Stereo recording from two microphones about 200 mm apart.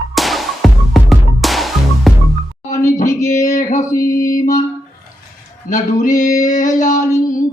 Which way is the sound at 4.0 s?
15° left (ahead or behind).